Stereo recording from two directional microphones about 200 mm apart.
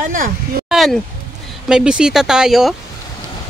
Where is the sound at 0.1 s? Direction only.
45° right (ahead or behind).